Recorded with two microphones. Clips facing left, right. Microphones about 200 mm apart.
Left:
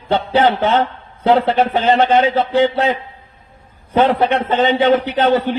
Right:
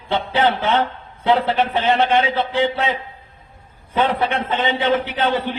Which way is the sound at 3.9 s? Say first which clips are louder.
Left 5 dB; 40° left (ahead or behind).